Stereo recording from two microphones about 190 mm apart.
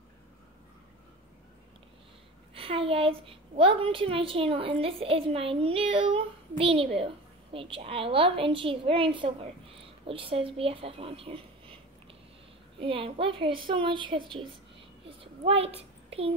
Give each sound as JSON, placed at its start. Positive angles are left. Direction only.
{"t": 2.5, "sound": "a woman's voice", "side_deg": -30}